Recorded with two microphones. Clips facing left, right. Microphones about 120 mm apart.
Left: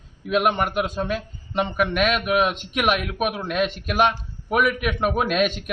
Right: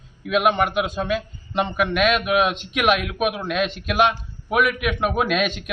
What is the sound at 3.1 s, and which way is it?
Speech, 10° right (ahead or behind).